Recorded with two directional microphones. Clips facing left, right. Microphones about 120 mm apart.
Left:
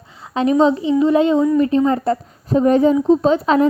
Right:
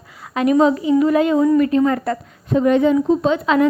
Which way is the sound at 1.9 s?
30° left (ahead or behind).